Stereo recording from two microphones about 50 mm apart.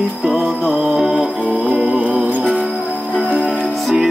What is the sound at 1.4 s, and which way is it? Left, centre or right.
Mantra, right.